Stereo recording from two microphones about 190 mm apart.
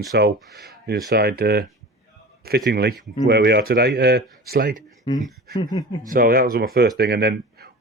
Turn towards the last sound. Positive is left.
turn(degrees=-60)  # may be behind; listen again after turning